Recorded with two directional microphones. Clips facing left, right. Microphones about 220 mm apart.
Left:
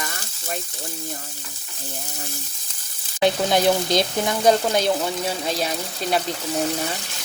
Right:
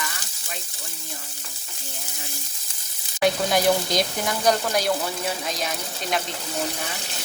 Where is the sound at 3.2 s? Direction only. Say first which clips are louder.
Left 2 dB; 25° left (ahead or behind).